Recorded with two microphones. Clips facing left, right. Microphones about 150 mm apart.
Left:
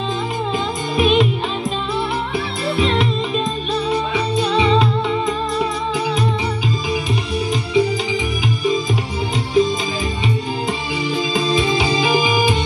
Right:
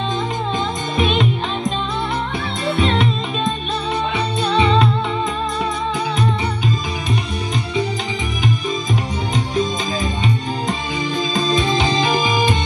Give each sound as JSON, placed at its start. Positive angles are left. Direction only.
{"t": 0.9, "sound": "music", "side_deg": 5}
{"t": 2.7, "sound": "music", "side_deg": 0}
{"t": 11.3, "sound": "music", "side_deg": 5}